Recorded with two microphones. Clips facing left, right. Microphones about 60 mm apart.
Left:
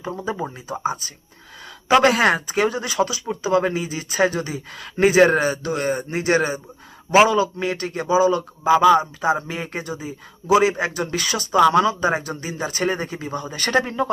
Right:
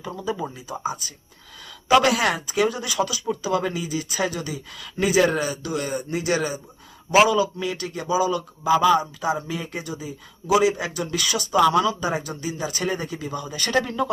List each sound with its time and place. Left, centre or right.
0.0 s speech: left
13.7 s speech: left